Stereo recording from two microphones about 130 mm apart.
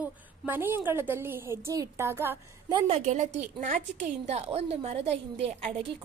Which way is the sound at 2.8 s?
60° right (ahead or behind).